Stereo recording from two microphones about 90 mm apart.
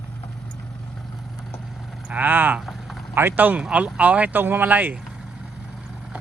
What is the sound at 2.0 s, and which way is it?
Speech, 20° right (ahead or behind).